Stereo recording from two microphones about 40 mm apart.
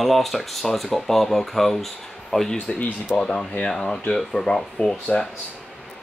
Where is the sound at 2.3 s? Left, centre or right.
Left.